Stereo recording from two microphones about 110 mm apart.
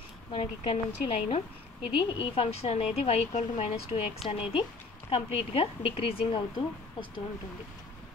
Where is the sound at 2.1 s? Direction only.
60° left (ahead or behind); by 4.0 s 90° left.